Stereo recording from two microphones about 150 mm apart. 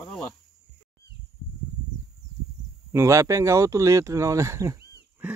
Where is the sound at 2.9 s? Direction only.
20° right (ahead or behind).